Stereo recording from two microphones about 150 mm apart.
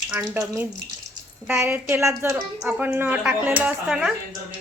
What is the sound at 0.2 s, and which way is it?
A woman's voice, 15° right (ahead or behind).